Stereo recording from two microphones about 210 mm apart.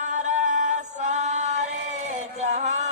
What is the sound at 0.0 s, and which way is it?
Music, 35° right (ahead or behind).